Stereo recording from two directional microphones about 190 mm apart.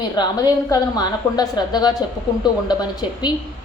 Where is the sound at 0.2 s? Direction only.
20° left (ahead or behind).